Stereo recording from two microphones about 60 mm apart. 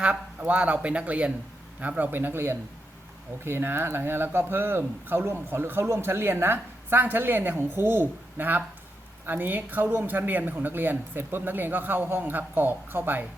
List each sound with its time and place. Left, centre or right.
0.0 s speech: right